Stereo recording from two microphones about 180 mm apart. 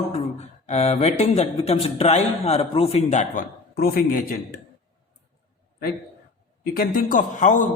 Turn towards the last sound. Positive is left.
turn(degrees=45)  # may be behind; listen again after turning